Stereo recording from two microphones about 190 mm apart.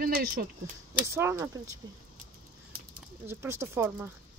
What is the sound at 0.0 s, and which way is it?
Speech, 50° right (ahead or behind).